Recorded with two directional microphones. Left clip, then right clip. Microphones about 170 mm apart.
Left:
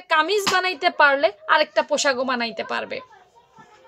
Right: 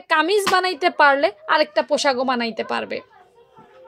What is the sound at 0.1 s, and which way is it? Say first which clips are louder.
A woman's voice: right 2 dB; 30° right (ahead or behind).